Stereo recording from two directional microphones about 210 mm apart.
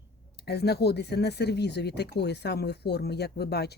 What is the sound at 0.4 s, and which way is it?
Speech, 50° left (ahead or behind).